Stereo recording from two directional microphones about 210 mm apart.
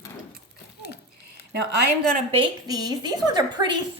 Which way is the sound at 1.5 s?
55° right (ahead or behind).